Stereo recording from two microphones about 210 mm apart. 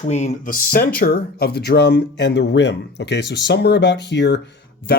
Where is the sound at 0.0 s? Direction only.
35° left (ahead or behind).